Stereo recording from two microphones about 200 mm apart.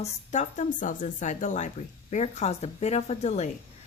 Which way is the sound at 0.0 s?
35° left (ahead or behind).